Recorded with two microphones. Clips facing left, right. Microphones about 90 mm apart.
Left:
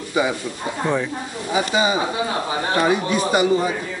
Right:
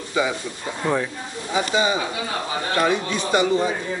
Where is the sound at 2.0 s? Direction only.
30° left (ahead or behind).